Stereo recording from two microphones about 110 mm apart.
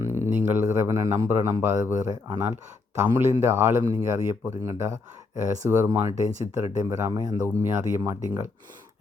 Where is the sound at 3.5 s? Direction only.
20° right (ahead or behind).